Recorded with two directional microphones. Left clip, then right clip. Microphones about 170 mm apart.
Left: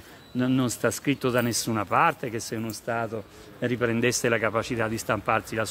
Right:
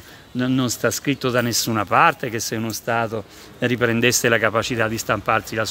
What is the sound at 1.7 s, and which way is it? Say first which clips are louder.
Speech: right 7 dB; 15° right (ahead or behind).